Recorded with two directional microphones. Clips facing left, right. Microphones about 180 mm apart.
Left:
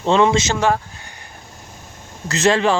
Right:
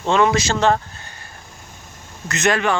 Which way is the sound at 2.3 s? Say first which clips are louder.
Left 3 dB; 30° left (ahead or behind).